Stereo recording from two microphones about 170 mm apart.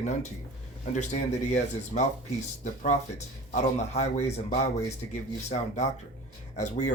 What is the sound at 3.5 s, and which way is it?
A man's voice, 40° left (ahead or behind).